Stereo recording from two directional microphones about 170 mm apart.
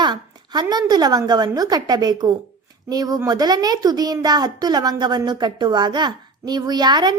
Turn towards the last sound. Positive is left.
turn(degrees=-25)  # may be behind; listen again after turning